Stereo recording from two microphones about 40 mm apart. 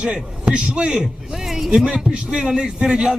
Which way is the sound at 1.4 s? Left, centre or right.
Centre.